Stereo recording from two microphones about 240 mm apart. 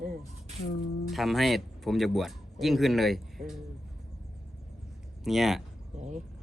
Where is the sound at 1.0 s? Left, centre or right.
Centre.